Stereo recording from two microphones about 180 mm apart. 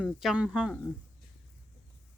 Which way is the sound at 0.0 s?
5° right (ahead or behind).